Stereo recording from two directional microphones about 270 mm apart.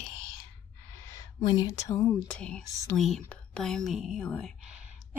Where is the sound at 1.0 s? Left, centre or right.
Centre.